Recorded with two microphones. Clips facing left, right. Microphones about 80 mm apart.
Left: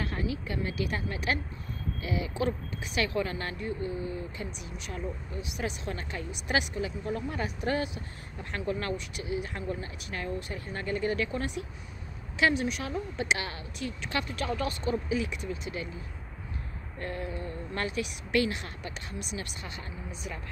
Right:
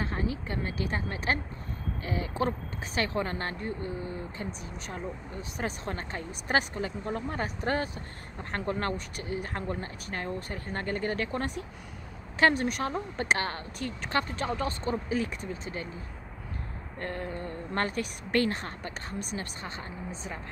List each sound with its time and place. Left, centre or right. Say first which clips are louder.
0.0 s speech: right 1 dB; right
17.0 s speech: right 1 dB; right